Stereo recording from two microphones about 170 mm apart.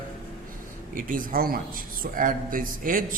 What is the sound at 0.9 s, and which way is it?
Speech, 55° right (ahead or behind).